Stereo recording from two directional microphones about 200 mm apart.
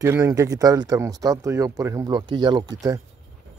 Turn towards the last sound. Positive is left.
turn(degrees=-15)  # may be behind; listen again after turning